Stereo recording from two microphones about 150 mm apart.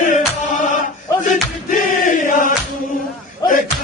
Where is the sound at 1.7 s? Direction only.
60° left (ahead or behind).